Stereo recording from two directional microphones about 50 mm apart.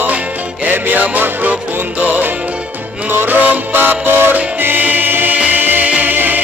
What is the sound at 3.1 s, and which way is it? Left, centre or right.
Music, right.